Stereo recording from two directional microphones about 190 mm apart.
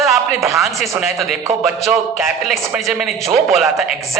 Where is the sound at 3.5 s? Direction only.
Centre (ahead or behind).